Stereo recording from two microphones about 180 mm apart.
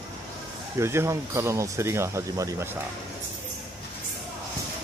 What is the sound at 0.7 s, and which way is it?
Speech, 15° right (ahead or behind).